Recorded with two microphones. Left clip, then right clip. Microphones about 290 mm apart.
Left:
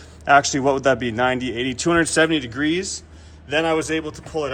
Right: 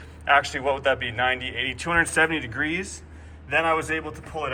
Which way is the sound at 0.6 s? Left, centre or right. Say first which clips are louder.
Left 5 dB; left.